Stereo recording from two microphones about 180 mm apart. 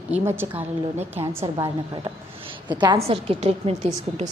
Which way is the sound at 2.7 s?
25° right (ahead or behind).